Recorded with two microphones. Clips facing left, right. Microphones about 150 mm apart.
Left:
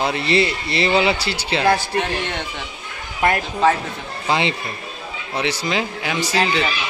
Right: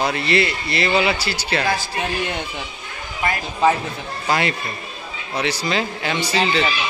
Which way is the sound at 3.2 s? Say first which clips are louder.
Left 5 dB; 60° left (ahead or behind).